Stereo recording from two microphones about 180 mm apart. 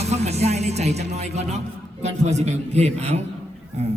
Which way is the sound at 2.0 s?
40° right (ahead or behind).